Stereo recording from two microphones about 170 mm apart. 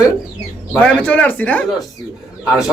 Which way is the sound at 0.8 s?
10° left (ahead or behind).